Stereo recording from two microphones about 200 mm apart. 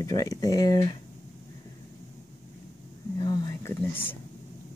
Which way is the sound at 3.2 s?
20° left (ahead or behind).